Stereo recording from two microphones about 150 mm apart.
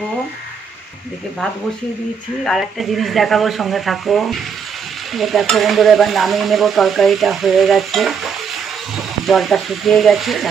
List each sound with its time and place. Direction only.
2.4 s stir: centre (ahead or behind)